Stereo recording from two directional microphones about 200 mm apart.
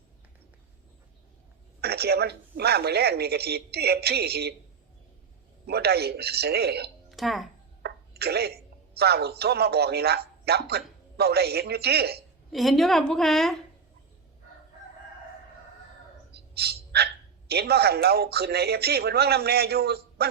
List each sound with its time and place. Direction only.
1.8 s a man's voice: 55° right (ahead or behind)
5.6 s a man's voice: 55° right (ahead or behind)
7.1 s speech: centre (ahead or behind)
7.8 s speech: 55° right (ahead or behind)
12.5 s a woman's voice: centre (ahead or behind)
16.3 s dog: 55° right (ahead or behind)
17.5 s a man's voice: 55° right (ahead or behind)